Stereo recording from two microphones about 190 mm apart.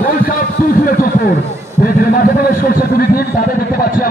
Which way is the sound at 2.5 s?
50° left (ahead or behind).